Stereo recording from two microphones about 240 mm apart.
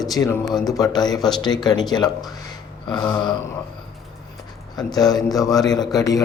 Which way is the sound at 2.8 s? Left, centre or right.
Centre.